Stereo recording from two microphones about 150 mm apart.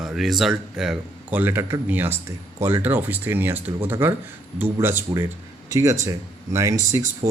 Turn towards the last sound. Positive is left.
turn(degrees=-20)  # may be behind; listen again after turning